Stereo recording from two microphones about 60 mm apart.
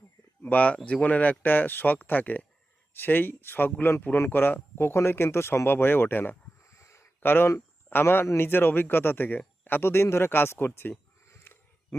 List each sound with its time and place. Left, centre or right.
0.4 s speech: left
6.7 s a sound: left
7.2 s speech: left